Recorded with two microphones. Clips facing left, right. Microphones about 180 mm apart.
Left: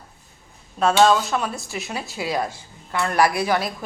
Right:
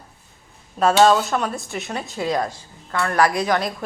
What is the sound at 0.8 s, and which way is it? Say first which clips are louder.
A woman's voice: right 2 dB; 5° right (ahead or behind).